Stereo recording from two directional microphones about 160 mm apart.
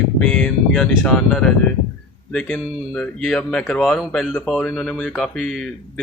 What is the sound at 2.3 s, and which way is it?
Speech, 5° left (ahead or behind).